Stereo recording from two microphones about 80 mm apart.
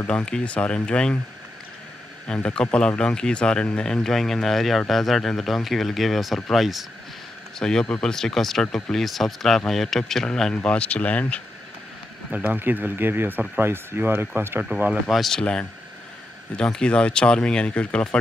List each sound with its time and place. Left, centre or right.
0.0 s speech: centre
2.2 s speech: centre
12.3 s speech: right
14.9 s speech: centre